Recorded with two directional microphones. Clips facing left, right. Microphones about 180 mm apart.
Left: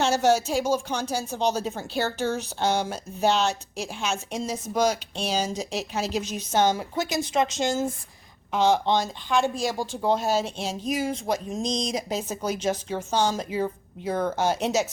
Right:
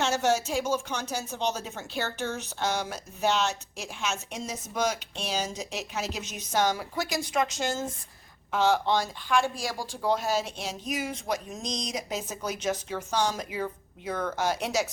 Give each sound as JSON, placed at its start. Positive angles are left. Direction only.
{"t": 0.0, "sound": "speech", "side_deg": 35}